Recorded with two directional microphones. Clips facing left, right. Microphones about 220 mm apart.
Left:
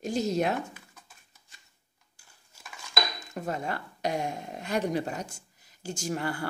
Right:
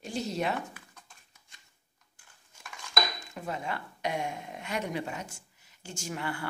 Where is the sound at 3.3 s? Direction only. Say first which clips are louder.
Left 3 dB; 40° left (ahead or behind).